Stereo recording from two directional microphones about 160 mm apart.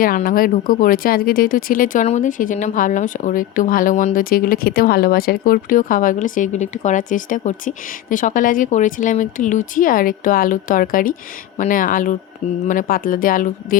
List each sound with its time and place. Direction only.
0.0 s speech: 60° left (ahead or behind)